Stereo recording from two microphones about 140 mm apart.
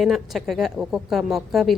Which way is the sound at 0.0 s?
Centre (ahead or behind).